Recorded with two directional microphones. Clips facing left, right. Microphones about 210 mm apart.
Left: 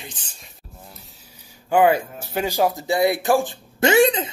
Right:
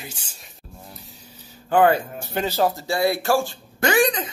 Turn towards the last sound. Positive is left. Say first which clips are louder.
# left 4 dB
turn(degrees=25)  # may be behind; listen again after turning